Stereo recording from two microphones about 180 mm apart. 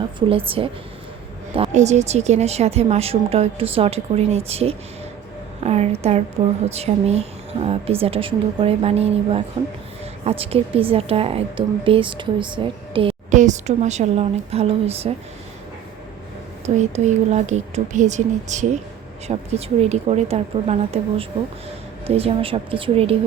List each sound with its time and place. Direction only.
0.2 s a woman's voice: 30° right (ahead or behind)
13.3 s a woman's voice: 40° right (ahead or behind)
16.6 s a woman's voice: 40° right (ahead or behind)